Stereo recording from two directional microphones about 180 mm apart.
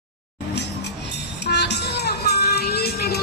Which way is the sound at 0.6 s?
70° left (ahead or behind).